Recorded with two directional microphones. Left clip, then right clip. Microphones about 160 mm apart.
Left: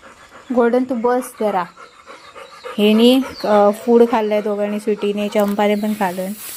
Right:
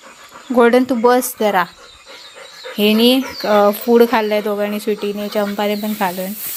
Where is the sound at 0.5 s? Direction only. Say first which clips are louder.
Right 4 dB; 15° right (ahead or behind).